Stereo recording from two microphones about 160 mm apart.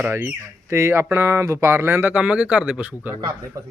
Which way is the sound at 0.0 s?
15° right (ahead or behind).